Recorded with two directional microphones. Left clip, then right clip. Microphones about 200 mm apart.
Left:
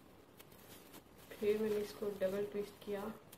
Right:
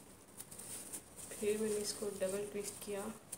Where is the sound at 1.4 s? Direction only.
Centre (ahead or behind).